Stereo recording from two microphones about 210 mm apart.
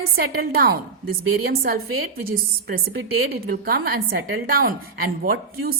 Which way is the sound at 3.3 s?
45° right (ahead or behind).